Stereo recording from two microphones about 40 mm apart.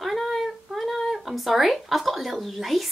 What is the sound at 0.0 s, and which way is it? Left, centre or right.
Speech, centre.